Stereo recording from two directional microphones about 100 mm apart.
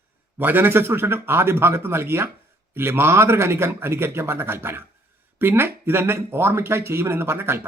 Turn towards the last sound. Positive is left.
turn(degrees=-25)  # may be behind; listen again after turning